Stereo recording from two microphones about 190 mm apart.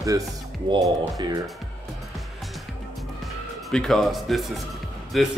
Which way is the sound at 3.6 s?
Centre (ahead or behind).